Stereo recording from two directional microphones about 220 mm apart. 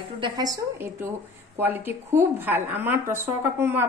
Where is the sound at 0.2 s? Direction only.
20° right (ahead or behind).